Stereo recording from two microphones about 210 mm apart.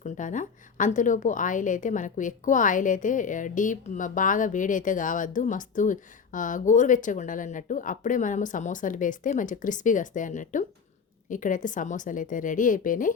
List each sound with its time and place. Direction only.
0.0 s a woman's voice: 35° left (ahead or behind)